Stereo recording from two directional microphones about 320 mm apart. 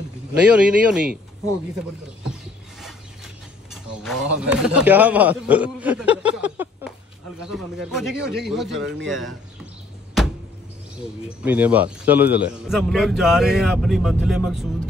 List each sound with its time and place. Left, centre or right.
0.5 s a man's voice: centre
3.7 s a sound: centre
4.4 s a man's voice: centre
11.2 s a man's voice: centre